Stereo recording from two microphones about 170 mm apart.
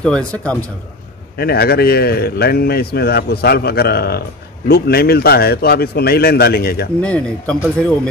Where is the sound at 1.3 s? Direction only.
65° left (ahead or behind).